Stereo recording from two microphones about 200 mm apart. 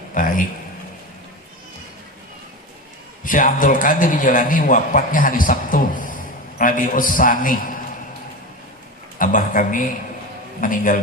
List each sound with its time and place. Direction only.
0.1 s a sound: 40° left (ahead or behind)
3.2 s a man's voice: 40° left (ahead or behind)
9.1 s speech: 40° left (ahead or behind)